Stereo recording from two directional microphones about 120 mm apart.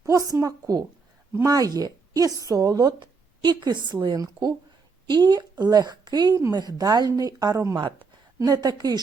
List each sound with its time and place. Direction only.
0.0 s a woman's voice: 30° right (ahead or behind)